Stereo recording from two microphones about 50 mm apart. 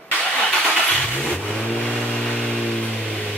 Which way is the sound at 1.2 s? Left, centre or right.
Left.